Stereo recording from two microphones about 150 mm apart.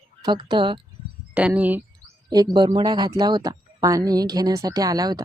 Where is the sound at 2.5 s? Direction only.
30° right (ahead or behind).